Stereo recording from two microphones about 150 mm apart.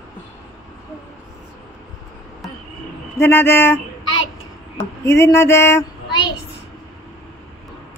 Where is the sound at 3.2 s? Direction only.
15° left (ahead or behind).